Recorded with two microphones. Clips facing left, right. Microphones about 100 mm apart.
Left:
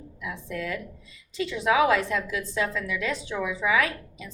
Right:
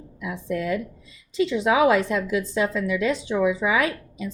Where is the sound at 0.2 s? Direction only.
20° right (ahead or behind).